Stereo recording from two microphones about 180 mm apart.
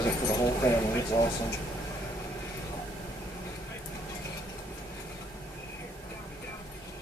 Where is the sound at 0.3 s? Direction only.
15° left (ahead or behind).